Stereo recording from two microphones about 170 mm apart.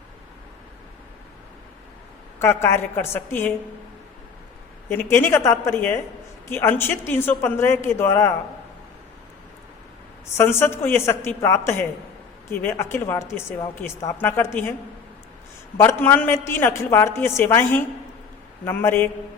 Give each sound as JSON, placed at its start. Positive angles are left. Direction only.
{"t": 2.4, "sound": "a woman's voice", "side_deg": 15}
{"t": 4.9, "sound": "a woman's voice", "side_deg": 15}
{"t": 10.3, "sound": "a woman's voice", "side_deg": 15}
{"t": 15.8, "sound": "a woman's voice", "side_deg": 15}